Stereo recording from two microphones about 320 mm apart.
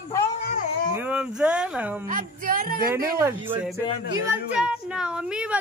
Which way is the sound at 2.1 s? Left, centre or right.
Right.